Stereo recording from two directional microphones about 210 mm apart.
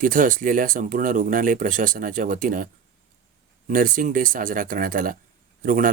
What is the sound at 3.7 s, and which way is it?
Speech, 40° right (ahead or behind).